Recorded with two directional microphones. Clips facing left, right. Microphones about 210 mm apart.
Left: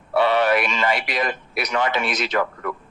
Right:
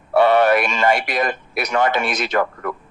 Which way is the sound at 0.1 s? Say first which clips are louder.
Right 4 dB; 45° right (ahead or behind).